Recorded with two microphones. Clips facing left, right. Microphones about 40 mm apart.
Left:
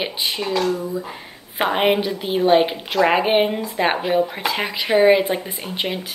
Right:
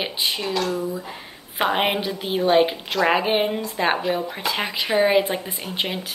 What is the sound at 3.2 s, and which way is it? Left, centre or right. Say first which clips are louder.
A woman's voice: left 3 dB; left.